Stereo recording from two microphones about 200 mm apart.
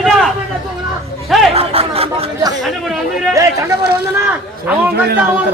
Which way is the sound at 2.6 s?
Centre (ahead or behind).